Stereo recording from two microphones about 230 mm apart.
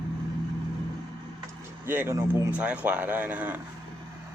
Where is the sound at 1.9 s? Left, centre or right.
Centre.